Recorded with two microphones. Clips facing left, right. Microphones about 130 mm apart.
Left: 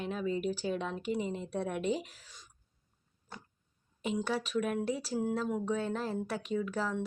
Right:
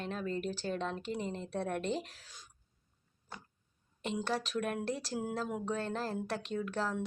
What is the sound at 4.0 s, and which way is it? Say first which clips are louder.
Speech: left 2 dB; 5° left (ahead or behind).